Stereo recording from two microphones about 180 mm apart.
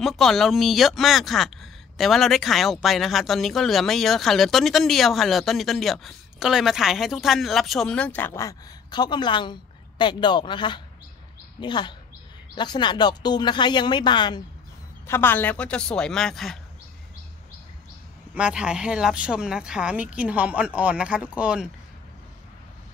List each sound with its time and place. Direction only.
0.0 s speech: centre (ahead or behind); by 14.4 s 25° left (ahead or behind)
15.0 s a woman's voice: 10° left (ahead or behind)
18.3 s speech: 5° right (ahead or behind)